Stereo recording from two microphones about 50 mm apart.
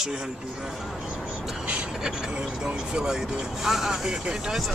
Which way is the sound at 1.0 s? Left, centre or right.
Centre.